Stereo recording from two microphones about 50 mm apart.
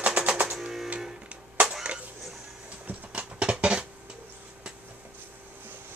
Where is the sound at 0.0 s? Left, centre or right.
Right.